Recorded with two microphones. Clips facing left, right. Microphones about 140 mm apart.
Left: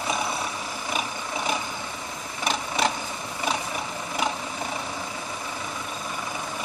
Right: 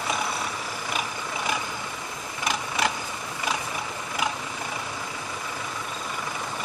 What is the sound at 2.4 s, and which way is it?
Vehicle, 25° left (ahead or behind).